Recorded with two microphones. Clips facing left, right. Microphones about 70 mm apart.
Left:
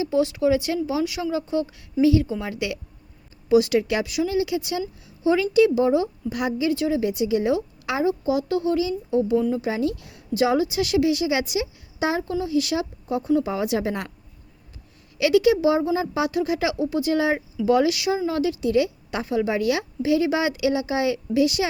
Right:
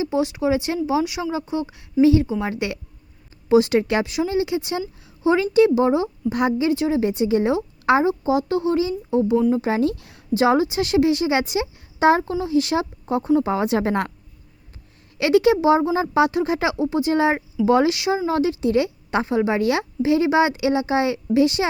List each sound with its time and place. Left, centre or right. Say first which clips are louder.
0.0 s a woman's voice: even; right
15.2 s a woman's voice: right 1 dB; right